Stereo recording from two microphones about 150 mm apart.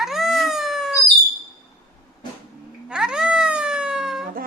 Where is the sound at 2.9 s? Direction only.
5° right (ahead or behind).